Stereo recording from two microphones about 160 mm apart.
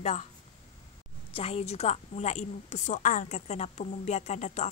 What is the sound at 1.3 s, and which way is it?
A woman's voice, 40° left (ahead or behind).